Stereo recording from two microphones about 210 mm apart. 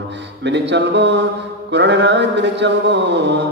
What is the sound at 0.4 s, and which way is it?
A man's voice, 55° right (ahead or behind).